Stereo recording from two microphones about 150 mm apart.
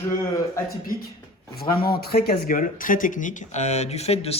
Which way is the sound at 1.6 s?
85° left.